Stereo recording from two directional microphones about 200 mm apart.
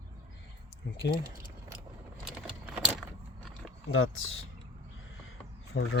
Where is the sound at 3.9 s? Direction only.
90° left.